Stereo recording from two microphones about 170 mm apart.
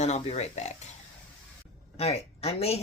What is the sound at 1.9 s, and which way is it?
Speech, 35° left (ahead or behind).